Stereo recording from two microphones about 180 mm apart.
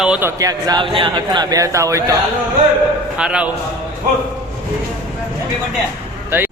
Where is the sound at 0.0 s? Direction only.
10° right (ahead or behind).